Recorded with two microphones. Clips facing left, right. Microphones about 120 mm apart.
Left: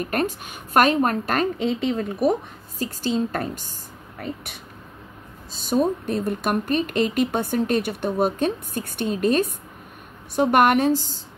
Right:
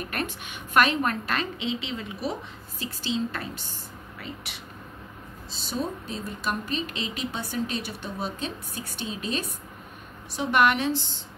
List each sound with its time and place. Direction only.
0.0 s speech: 45° left (ahead or behind)
5.5 s speech: 50° left (ahead or behind)